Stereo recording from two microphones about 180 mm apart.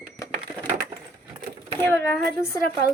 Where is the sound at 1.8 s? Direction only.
15° left (ahead or behind).